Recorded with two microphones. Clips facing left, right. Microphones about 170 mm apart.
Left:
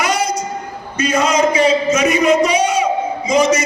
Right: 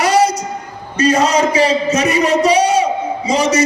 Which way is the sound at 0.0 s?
35° right (ahead or behind).